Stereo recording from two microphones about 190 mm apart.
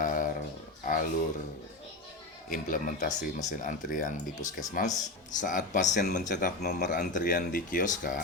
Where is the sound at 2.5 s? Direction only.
45° left (ahead or behind).